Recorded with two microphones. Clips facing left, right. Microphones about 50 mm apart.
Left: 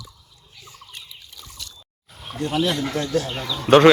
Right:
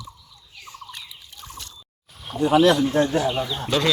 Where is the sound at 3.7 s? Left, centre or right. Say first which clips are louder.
Left 12 dB; left.